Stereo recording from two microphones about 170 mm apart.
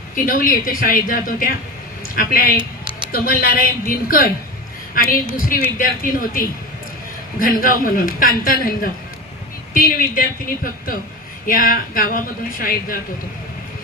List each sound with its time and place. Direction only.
0.1 s a woman's voice: 55° left (ahead or behind)